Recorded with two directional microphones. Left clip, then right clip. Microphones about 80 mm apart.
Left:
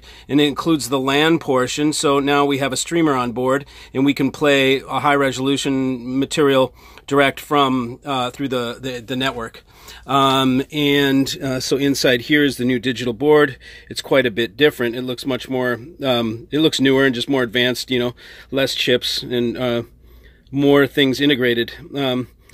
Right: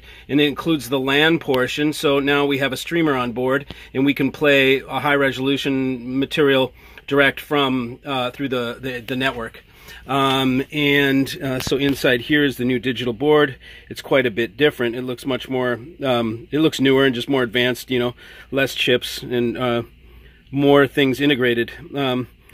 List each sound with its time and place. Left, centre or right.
0.3 s speech: left
10.0 s speech: left; by 22.2 s centre